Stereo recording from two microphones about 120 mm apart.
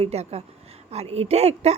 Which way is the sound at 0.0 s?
60° right (ahead or behind).